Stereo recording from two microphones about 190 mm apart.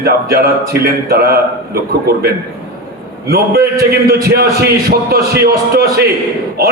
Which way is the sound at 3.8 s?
55° right (ahead or behind).